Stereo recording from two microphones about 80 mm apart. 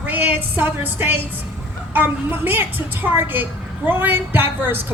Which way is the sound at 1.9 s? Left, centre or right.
Right.